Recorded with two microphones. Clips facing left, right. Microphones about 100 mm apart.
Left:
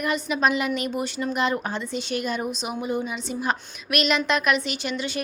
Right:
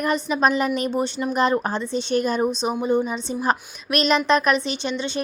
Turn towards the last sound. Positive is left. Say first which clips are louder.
# right 3 dB
turn(degrees=-25)  # may be behind; listen again after turning